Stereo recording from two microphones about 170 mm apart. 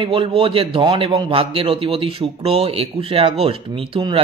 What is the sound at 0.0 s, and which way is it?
A man's voice, 30° right (ahead or behind).